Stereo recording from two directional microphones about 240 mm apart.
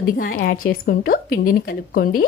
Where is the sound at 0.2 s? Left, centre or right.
Left.